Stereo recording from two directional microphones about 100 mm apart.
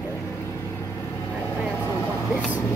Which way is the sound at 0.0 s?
25° left (ahead or behind).